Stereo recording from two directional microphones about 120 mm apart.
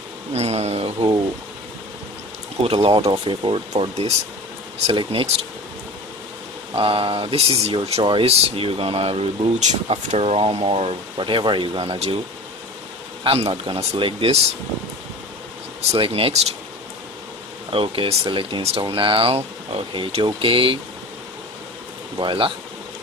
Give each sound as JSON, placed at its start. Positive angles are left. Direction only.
{"t": 0.3, "sound": "speech", "side_deg": -60}
{"t": 2.6, "sound": "speech", "side_deg": -50}
{"t": 3.7, "sound": "speech", "side_deg": -60}
{"t": 4.9, "sound": "speech", "side_deg": -50}
{"t": 6.7, "sound": "speech", "side_deg": -50}
{"t": 9.6, "sound": "speech", "side_deg": -60}
{"t": 13.2, "sound": "speech", "side_deg": -50}
{"t": 16.0, "sound": "speech", "side_deg": -50}
{"t": 17.6, "sound": "speech", "side_deg": -50}
{"t": 22.1, "sound": "speech", "side_deg": -45}